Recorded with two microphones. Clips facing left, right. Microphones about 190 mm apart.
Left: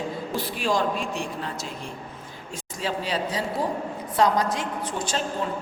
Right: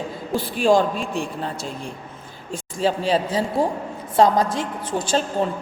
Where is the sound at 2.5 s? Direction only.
30° right (ahead or behind).